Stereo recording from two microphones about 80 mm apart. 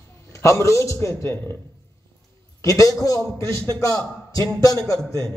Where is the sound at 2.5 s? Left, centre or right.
Left.